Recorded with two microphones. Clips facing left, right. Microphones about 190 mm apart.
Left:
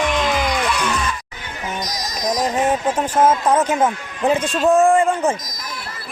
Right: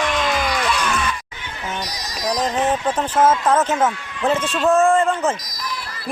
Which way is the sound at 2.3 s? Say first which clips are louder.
Left 1 dB; 10° left (ahead or behind).